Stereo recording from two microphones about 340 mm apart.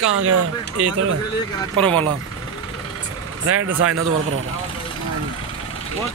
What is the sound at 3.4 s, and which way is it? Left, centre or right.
Speech, right.